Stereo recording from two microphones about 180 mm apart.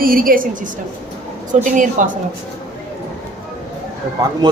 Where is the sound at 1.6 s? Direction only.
45° right (ahead or behind).